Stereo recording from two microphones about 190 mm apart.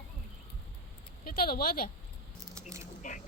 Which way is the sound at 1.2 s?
50° left (ahead or behind).